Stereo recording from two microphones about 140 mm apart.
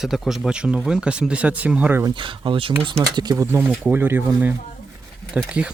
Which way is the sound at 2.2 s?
35° right (ahead or behind).